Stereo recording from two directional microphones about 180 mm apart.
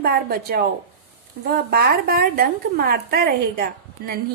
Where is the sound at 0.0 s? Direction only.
55° right (ahead or behind).